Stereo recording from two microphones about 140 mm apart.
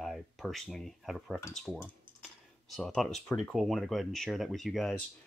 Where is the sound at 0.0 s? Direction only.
Centre (ahead or behind).